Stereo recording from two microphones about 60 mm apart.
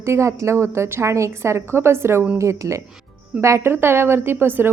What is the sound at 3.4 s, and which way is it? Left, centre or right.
A woman's voice, right.